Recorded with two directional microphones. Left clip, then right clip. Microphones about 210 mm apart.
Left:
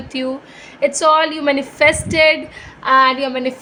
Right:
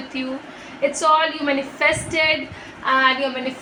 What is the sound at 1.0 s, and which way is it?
A woman's voice, 55° left (ahead or behind).